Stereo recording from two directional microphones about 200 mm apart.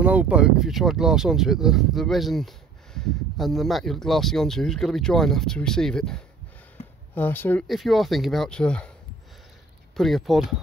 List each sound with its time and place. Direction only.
0.0 s speech: 5° right (ahead or behind)
9.9 s speech: centre (ahead or behind)